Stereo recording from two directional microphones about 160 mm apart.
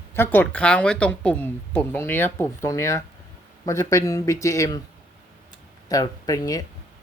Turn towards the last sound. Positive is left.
turn(degrees=20)  # may be behind; listen again after turning